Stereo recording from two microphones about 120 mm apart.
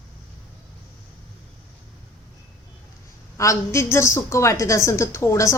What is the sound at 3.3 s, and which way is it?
A woman's voice, 25° left (ahead or behind).